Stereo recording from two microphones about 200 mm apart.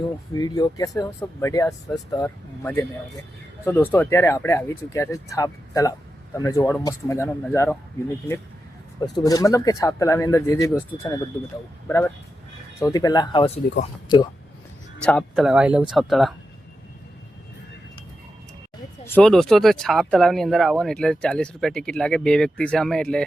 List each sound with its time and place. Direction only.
0.3 s speech: 20° left (ahead or behind)
9.1 s speech: 20° left (ahead or behind)
15.0 s speech: centre (ahead or behind)
19.0 s speech: 5° left (ahead or behind)